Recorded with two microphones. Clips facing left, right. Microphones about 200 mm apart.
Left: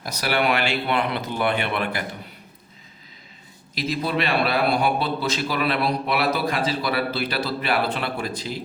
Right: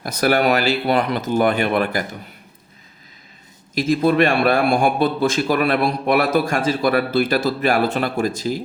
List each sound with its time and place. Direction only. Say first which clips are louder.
0.0 s speech: right 6 dB; 50° right (ahead or behind)
3.8 s a man's voice: right 9 dB; 50° right (ahead or behind)